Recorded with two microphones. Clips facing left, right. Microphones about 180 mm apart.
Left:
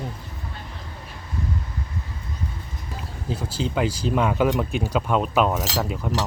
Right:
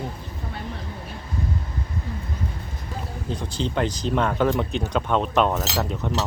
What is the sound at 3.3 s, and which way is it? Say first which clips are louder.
Speech: left 1 dB; 5° left (ahead or behind).